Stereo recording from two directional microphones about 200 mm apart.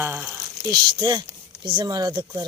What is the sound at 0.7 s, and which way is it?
Speech, 20° right (ahead or behind).